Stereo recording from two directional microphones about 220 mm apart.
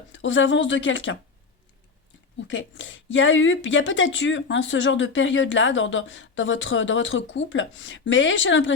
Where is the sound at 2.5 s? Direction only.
60° left (ahead or behind).